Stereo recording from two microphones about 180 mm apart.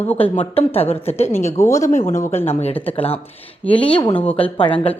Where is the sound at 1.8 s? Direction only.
45° left (ahead or behind).